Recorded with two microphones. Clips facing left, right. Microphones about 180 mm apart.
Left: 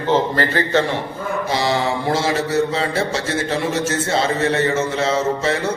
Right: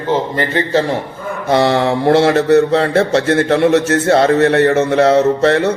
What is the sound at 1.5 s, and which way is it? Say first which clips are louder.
Speech: right 8 dB; 60° right (ahead or behind).